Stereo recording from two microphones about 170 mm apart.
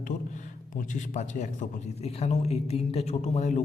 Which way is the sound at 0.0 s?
45° left (ahead or behind).